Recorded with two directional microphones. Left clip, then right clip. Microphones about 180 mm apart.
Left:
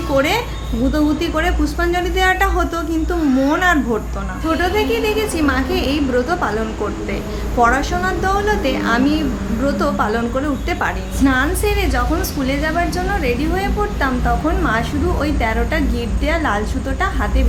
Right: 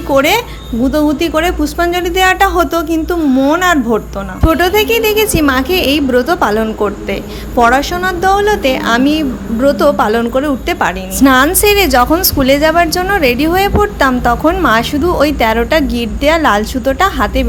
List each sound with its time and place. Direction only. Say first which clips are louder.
0.1 s a woman's voice: right 7 dB; 50° right (ahead or behind)